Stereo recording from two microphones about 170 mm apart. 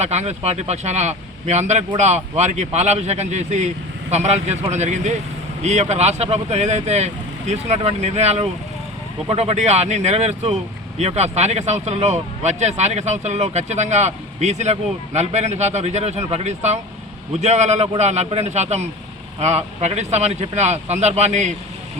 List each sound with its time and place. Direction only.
0.0 s speech: 40° right (ahead or behind)